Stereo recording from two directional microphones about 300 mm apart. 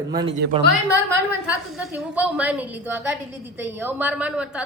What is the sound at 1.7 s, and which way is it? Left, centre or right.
A man's voice, centre.